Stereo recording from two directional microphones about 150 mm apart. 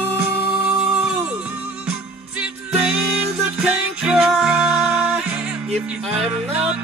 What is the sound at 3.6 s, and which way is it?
Music, 5° right (ahead or behind).